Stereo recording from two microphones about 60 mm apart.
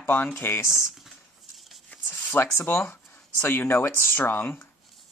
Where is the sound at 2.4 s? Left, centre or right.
Left.